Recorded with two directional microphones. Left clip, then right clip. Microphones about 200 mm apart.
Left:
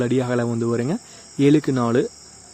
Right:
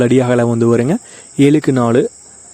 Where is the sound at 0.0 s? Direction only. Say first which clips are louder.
Right 9 dB; 40° right (ahead or behind).